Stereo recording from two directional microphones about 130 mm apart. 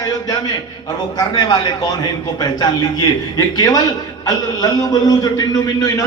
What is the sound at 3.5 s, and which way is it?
A man's voice, 30° left (ahead or behind).